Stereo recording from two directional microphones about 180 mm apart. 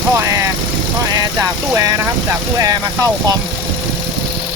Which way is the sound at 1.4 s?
15° right (ahead or behind).